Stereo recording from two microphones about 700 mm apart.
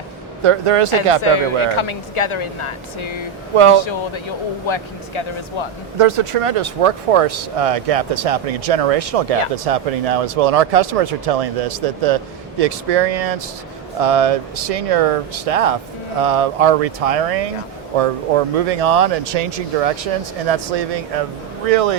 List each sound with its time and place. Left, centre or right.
0.4 s speech: right
1.2 s speech: left
3.5 s speech: right
3.8 s speech: left
6.0 s speech: right